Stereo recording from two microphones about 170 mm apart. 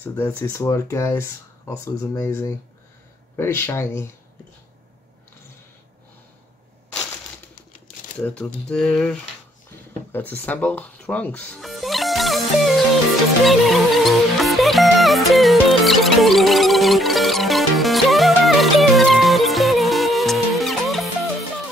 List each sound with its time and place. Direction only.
0.0 s speech: 15° left (ahead or behind)
8.2 s speech: 5° left (ahead or behind)
10.1 s music: 10° left (ahead or behind)